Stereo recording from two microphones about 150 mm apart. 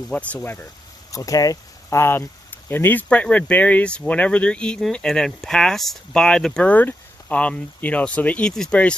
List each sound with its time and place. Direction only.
0.1 s speech: 10° left (ahead or behind)
1.1 s speech: 25° left (ahead or behind); by 8.9 s 5° left (ahead or behind)